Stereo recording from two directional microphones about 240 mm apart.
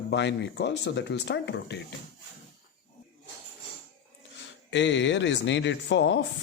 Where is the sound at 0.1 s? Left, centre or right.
Left.